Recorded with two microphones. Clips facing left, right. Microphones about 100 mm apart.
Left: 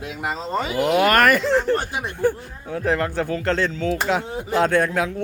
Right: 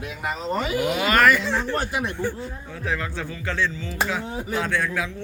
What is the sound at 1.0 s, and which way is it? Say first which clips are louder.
Speech: left 2 dB; 55° left (ahead or behind).